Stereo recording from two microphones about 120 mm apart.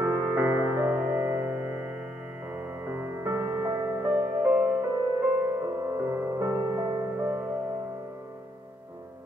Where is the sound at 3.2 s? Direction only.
30° right (ahead or behind).